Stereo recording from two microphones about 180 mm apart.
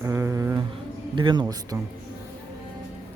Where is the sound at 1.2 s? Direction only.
25° right (ahead or behind).